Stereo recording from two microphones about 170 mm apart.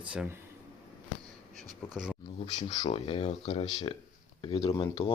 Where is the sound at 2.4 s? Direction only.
25° left (ahead or behind).